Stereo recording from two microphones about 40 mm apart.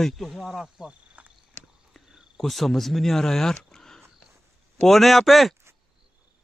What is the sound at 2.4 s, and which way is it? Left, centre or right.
Speech, centre.